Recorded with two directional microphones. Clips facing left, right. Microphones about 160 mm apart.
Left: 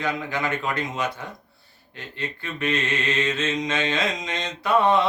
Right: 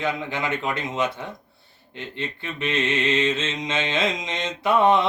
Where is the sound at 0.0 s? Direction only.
20° right (ahead or behind).